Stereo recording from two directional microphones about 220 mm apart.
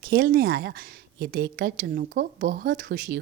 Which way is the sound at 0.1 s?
45° right (ahead or behind).